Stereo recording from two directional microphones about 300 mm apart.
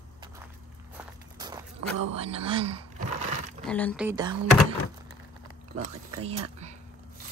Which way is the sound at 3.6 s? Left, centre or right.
Centre.